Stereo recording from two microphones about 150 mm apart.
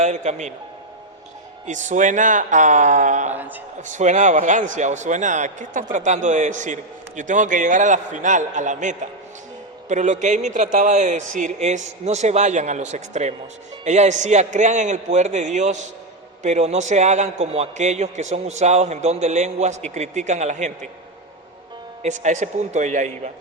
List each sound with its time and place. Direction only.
0.0 s a man's voice: 50° right (ahead or behind)
1.6 s a man's voice: 55° right (ahead or behind)
3.3 s a man's voice: 10° right (ahead or behind)
3.8 s a man's voice: 55° right (ahead or behind)
22.0 s a man's voice: 55° right (ahead or behind)